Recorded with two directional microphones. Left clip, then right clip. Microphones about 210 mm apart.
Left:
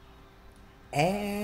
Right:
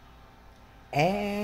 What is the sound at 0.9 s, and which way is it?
Speech, 15° right (ahead or behind).